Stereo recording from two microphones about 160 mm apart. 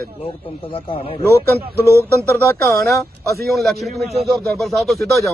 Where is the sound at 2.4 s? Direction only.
20° left (ahead or behind).